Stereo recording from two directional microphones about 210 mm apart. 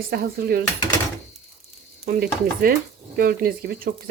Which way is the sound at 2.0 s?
45° right (ahead or behind).